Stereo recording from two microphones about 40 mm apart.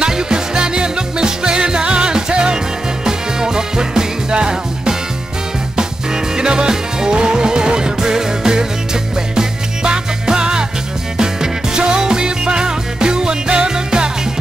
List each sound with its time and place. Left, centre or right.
0.0 s music: right
6.3 s music: centre